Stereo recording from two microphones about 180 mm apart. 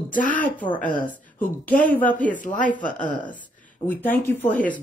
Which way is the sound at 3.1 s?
10° left (ahead or behind).